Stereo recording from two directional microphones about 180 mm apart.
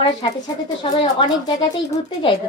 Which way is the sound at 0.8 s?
25° left (ahead or behind).